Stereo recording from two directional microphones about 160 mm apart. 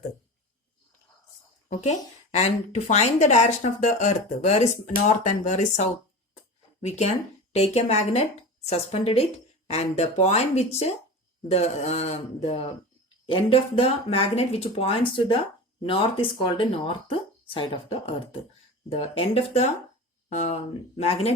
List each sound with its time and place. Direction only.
1.7 s a woman's voice: 45° left (ahead or behind)